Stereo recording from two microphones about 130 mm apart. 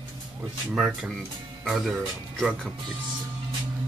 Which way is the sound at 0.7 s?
10° right (ahead or behind).